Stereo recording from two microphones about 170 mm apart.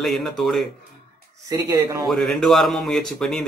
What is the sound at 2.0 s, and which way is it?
Speech, 5° left (ahead or behind).